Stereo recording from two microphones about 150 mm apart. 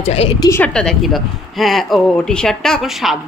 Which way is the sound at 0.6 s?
5° left (ahead or behind).